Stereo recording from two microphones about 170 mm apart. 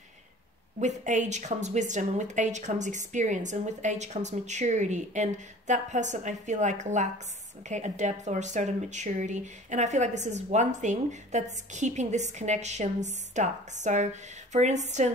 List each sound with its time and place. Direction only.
0.7 s speech: 45° right (ahead or behind)